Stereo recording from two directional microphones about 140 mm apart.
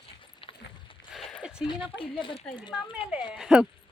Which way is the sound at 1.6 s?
35° left (ahead or behind).